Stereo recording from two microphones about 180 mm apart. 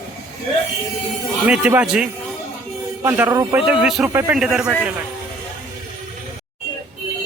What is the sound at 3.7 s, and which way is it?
Speech, 5° right (ahead or behind).